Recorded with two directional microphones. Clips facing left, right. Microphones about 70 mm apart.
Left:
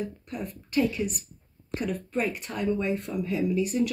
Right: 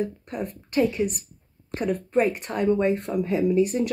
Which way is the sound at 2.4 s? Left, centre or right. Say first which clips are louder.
Right 6 dB; right.